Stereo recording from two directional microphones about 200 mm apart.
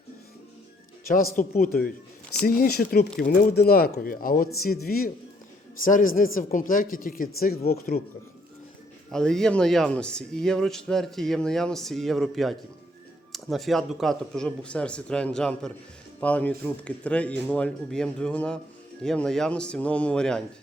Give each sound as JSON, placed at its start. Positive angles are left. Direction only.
{"t": 1.0, "sound": "speech", "side_deg": 45}
{"t": 9.1, "sound": "a man's voice", "side_deg": 5}